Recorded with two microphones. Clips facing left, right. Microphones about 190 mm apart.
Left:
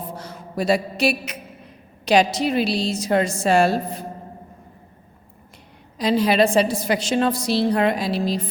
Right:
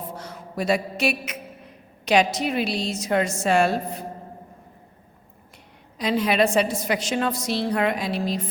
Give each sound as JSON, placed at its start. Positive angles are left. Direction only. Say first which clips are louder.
{"t": 0.2, "sound": "a sound", "louder": "left 4 dB", "side_deg": 35}
{"t": 2.0, "sound": "a woman's voice", "louder": "left 3 dB", "side_deg": 35}
{"t": 6.0, "sound": "a woman's voice", "louder": "left 3 dB", "side_deg": 35}